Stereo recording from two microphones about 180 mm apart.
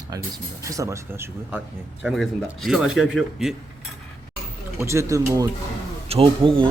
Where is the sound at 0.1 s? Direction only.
20° right (ahead or behind); by 3.5 s centre (ahead or behind).